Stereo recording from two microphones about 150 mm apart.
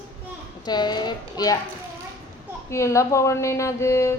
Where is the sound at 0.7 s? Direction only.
30° left (ahead or behind).